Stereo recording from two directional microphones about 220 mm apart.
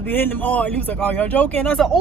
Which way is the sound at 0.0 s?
10° left (ahead or behind).